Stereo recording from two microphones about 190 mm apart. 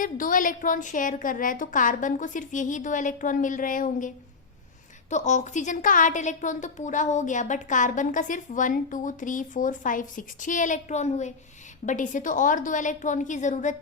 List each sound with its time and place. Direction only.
0.0 s a woman's voice: 45° left (ahead or behind)